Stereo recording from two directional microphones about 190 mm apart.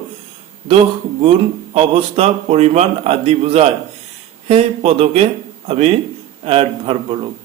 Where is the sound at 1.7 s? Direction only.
30° right (ahead or behind).